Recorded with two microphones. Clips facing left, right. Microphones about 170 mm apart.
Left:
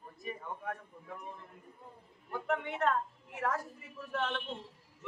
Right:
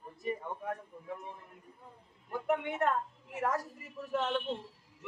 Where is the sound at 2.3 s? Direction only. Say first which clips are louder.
Right 3 dB; 15° right (ahead or behind).